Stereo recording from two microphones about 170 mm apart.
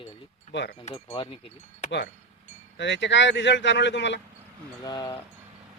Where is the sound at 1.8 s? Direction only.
90° left.